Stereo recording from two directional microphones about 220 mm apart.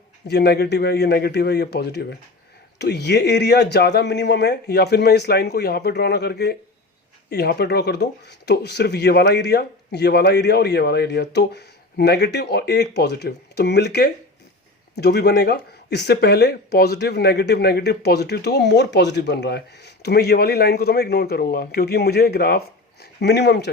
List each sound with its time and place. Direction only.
0.3 s speech: 45° left (ahead or behind)